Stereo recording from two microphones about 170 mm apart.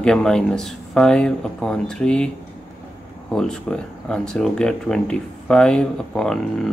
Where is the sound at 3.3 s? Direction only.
5° left (ahead or behind).